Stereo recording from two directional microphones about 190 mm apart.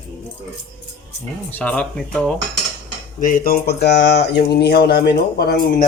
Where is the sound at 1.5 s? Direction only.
5° left (ahead or behind).